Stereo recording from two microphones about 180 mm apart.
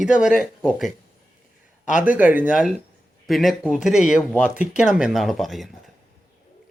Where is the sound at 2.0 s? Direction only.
10° right (ahead or behind).